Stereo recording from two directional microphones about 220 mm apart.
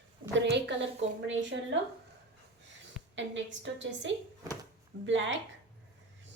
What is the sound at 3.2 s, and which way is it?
A woman's voice, 55° right (ahead or behind).